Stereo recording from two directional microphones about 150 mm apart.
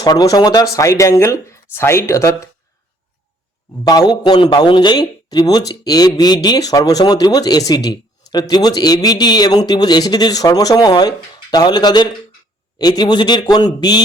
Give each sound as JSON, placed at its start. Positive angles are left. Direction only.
{"t": 0.0, "sound": "speech", "side_deg": 25}
{"t": 3.8, "sound": "speech", "side_deg": 25}